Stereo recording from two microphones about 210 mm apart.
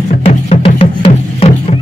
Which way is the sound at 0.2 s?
30° left (ahead or behind).